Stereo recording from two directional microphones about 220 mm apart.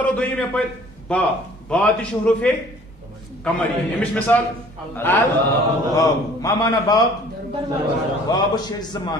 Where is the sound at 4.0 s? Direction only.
5° left (ahead or behind).